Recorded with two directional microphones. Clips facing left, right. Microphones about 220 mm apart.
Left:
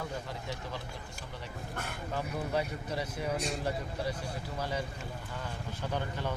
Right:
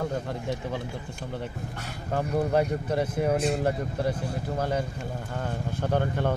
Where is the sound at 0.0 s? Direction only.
50° right (ahead or behind).